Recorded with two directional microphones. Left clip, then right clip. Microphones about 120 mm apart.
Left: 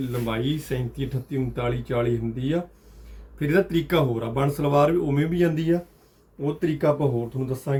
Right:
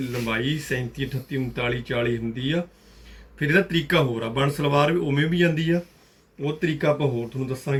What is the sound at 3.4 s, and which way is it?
Speech, 30° left (ahead or behind).